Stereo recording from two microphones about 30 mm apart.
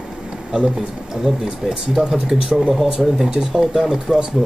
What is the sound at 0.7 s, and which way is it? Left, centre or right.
Speech, centre.